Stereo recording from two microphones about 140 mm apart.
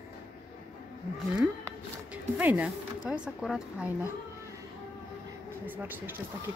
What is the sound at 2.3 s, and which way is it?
Speech, 10° right (ahead or behind).